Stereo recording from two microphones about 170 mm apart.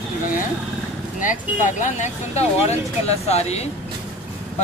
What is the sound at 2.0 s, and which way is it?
Speech, 40° left (ahead or behind).